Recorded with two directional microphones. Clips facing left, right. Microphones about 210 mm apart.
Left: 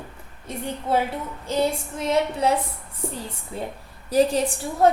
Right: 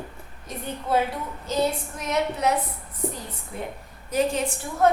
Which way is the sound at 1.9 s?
30° left (ahead or behind).